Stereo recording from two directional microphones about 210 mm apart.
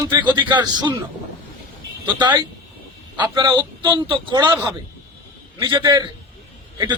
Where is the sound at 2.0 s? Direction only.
20° right (ahead or behind).